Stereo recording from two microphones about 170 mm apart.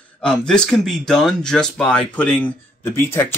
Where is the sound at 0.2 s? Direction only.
5° left (ahead or behind).